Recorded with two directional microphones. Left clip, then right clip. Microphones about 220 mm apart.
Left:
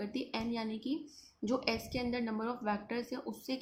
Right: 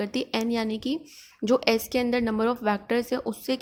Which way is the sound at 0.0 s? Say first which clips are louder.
Right 11 dB; 40° right (ahead or behind).